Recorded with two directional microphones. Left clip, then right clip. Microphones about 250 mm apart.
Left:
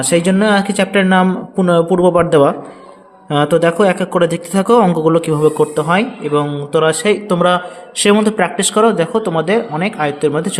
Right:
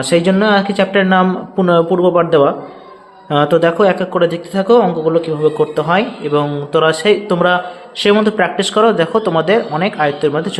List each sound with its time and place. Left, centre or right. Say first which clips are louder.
0.0 s a man's voice: right 1 dB; centre